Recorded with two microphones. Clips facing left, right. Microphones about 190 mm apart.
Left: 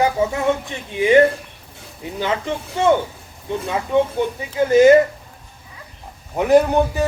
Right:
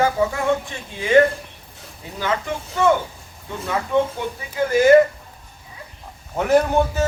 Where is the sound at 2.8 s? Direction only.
25° left (ahead or behind).